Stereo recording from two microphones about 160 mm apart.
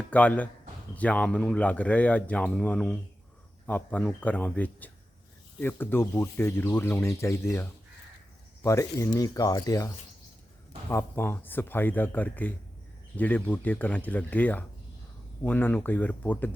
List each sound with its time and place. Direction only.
0.1 s speech: 10° left (ahead or behind)